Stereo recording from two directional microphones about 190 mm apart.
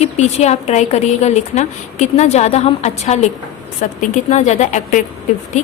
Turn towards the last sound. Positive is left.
turn(degrees=40)  # may be behind; listen again after turning